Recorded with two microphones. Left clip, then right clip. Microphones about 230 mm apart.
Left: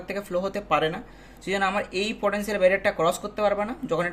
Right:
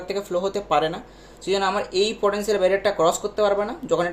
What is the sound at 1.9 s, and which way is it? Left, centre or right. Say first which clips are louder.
Speech: right 6 dB; left.